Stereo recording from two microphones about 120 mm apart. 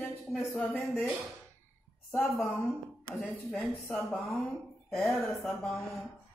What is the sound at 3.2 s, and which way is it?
A woman's voice, 15° left (ahead or behind).